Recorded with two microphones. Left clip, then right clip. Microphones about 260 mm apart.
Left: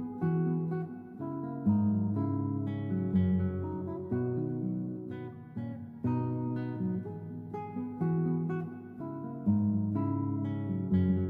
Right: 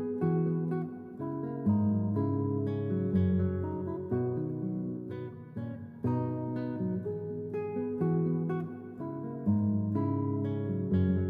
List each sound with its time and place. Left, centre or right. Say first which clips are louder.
0.2 s music: left 2 dB; right
6.0 s music: right 1 dB; right
8.0 s music: left 2 dB; right